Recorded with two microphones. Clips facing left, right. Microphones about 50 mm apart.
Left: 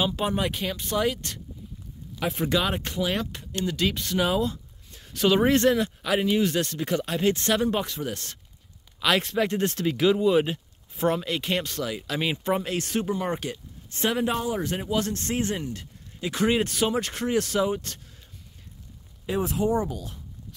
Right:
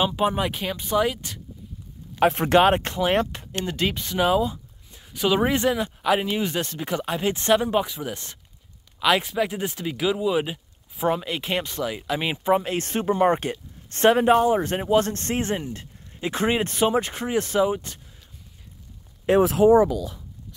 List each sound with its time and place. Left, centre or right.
0.0 s speech: centre
2.2 s speech: right
3.1 s speech: right
4.0 s speech: centre
9.0 s speech: centre
12.6 s speech: right
13.8 s speech: right
14.1 s speech: right; by 17.9 s centre
19.2 s speech: right